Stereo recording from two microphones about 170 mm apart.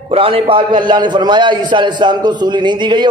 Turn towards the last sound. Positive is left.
turn(degrees=-25)  # may be behind; listen again after turning